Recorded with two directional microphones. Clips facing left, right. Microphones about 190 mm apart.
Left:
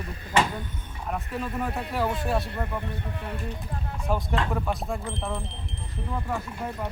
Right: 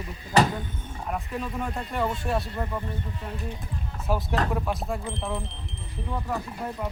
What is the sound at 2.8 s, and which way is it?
Speech, 65° left (ahead or behind).